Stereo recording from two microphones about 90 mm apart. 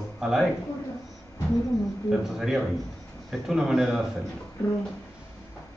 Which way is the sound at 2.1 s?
5° right (ahead or behind).